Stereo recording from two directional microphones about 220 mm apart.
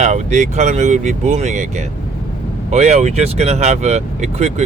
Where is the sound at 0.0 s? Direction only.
30° right (ahead or behind).